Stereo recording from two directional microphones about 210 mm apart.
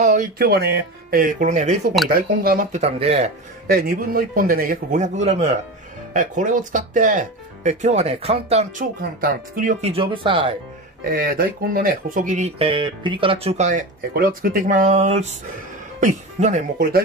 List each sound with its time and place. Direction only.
0.0 s a man's voice: 40° right (ahead or behind)
2.8 s speech: 30° right (ahead or behind)
3.6 s a man's voice: 45° right (ahead or behind)
9.2 s speech: 40° right (ahead or behind); by 10.5 s 25° right (ahead or behind)
11.1 s speech: 45° right (ahead or behind)
16.7 s a man's voice: 45° right (ahead or behind)